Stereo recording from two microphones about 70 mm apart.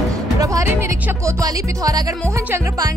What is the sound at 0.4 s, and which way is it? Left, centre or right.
Music, right.